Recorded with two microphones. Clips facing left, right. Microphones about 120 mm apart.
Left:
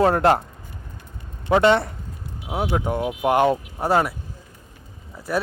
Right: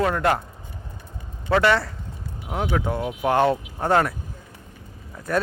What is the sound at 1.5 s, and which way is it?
A man's voice, 20° left (ahead or behind).